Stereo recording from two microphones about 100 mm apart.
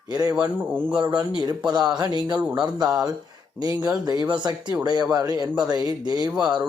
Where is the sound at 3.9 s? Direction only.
40° right (ahead or behind).